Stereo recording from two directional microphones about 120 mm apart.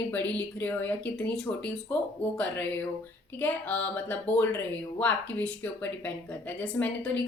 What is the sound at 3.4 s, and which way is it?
A woman's voice, 10° left (ahead or behind).